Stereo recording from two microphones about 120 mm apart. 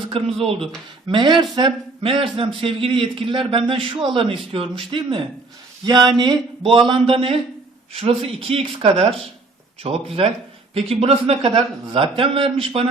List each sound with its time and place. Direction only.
0.1 s a man's voice: 50° right (ahead or behind)
1.1 s a man's voice: 40° right (ahead or behind)